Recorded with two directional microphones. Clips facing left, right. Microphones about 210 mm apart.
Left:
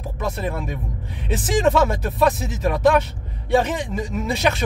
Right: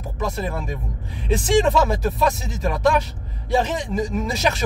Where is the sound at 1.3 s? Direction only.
Centre (ahead or behind).